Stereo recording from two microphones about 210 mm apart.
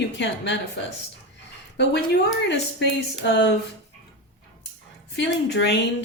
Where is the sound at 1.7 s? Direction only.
55° left (ahead or behind).